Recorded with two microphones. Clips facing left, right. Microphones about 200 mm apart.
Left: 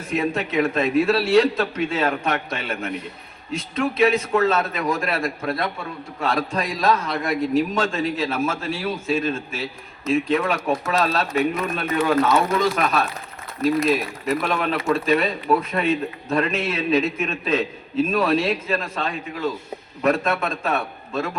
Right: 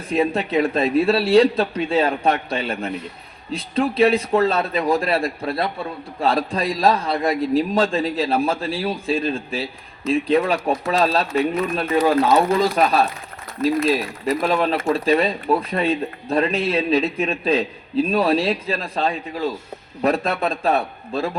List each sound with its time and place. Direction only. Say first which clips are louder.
0.1 s a man's voice: right 4 dB; 35° right (ahead or behind)